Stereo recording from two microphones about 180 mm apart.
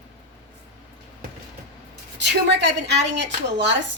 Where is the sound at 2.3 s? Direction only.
70° right (ahead or behind).